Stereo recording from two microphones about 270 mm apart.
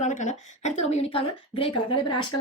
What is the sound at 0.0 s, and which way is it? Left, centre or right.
Speech, left.